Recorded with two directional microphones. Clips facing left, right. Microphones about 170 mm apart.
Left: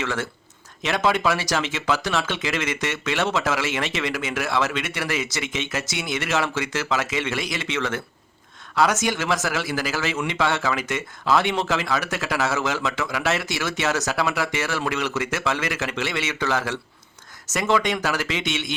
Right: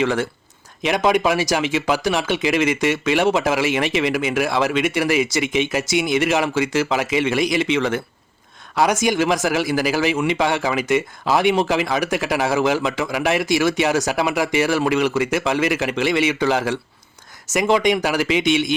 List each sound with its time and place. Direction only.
0.0 s a man's voice: 15° right (ahead or behind)